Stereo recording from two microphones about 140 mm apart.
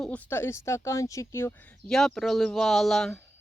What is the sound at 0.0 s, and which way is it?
Speech, 10° left (ahead or behind).